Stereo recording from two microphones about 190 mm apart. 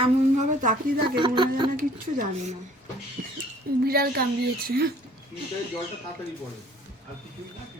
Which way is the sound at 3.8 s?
55° right (ahead or behind).